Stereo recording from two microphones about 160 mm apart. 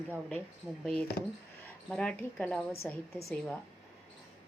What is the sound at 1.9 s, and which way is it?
A woman's voice, 5° left (ahead or behind).